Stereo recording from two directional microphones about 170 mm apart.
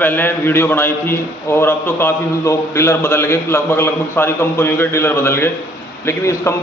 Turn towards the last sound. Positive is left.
turn(degrees=15)  # may be behind; listen again after turning